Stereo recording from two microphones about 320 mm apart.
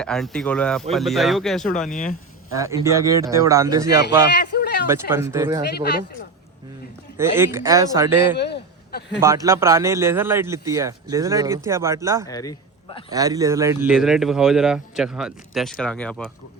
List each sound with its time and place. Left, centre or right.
0.0 s speech: centre
1.9 s speech: left
2.5 s a man's voice: centre
4.3 s a sound: left
4.9 s a man's voice: centre
5.6 s speech: left
7.2 s a man's voice: centre
8.9 s a man's voice: left
9.2 s a man's voice: centre
12.3 s a man's voice: centre
13.1 s speech: centre